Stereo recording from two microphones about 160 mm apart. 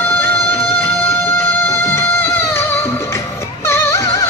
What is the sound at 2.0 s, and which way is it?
Music, 15° left (ahead or behind).